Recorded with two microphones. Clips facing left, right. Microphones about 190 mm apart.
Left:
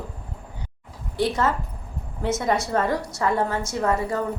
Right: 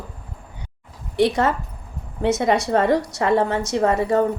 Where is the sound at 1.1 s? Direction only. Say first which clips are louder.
Right 4 dB; 70° right (ahead or behind).